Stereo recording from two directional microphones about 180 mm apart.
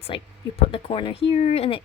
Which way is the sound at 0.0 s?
30° left (ahead or behind).